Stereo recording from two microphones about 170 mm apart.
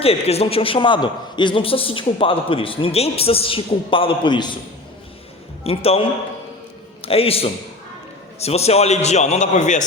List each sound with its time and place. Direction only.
0.0 s a man's voice: 35° left (ahead or behind)
5.6 s a man's voice: 35° left (ahead or behind)